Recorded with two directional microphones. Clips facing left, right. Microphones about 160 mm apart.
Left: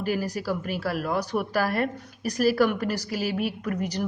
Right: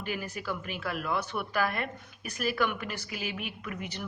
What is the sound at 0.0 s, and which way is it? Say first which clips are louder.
Speech: left 8 dB; 40° left (ahead or behind).